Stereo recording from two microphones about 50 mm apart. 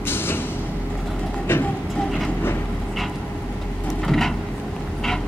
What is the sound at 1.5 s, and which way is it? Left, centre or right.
Train, left.